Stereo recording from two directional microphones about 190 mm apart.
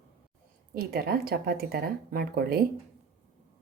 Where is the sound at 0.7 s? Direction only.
50° right (ahead or behind).